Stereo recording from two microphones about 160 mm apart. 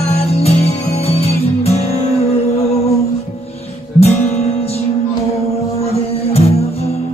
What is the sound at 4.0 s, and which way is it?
Guitar, 45° left (ahead or behind).